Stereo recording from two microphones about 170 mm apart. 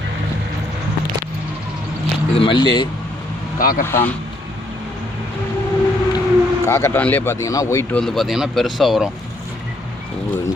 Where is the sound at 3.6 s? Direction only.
55° left (ahead or behind).